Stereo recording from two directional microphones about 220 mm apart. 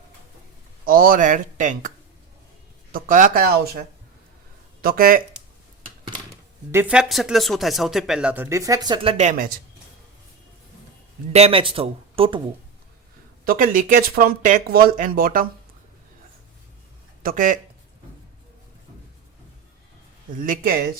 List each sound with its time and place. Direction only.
0.9 s speech: 40° right (ahead or behind)
2.9 s speech: 40° right (ahead or behind)
6.7 s speech: 10° right (ahead or behind); by 9.5 s 30° right (ahead or behind)
11.3 s speech: 30° right (ahead or behind)
13.4 s speech: 40° right (ahead or behind)
17.2 s speech: 35° right (ahead or behind)
20.4 s speech: 40° right (ahead or behind)